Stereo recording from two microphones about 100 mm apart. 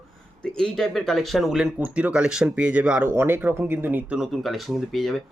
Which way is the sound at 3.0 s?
25° right (ahead or behind).